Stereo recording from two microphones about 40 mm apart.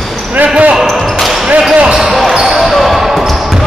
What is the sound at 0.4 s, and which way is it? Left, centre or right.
Basketball bounce, right.